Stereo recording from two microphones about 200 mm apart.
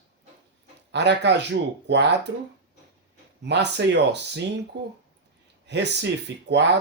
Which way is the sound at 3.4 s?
60° right (ahead or behind).